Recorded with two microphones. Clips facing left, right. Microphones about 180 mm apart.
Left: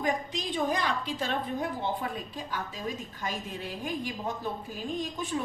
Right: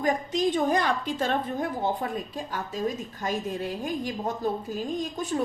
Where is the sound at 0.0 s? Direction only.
45° right (ahead or behind).